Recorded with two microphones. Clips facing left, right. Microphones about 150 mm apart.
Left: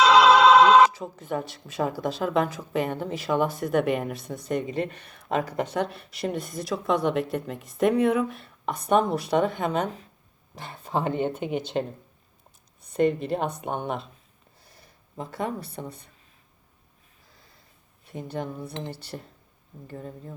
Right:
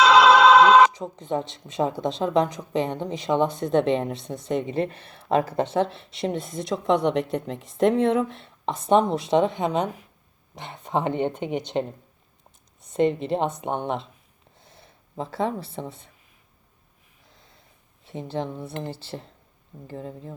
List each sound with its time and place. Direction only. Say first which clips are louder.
0.0 s music: right 1 dB; 75° right (ahead or behind); by 0.9 s 90° right
0.9 s speech: right 2 dB; 20° right (ahead or behind)
14.6 s a sound: right 4 dB; 25° right (ahead or behind)
18.0 s speech: right 3 dB; 25° right (ahead or behind)